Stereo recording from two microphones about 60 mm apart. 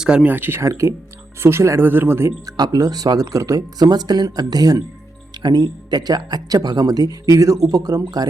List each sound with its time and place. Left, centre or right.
0.0 s speech: centre
0.3 s speech: right
0.6 s speech: right
2.5 s speech: right